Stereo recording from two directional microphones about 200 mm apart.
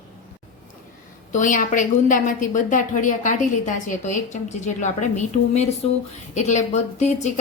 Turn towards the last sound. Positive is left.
turn(degrees=35)  # may be behind; listen again after turning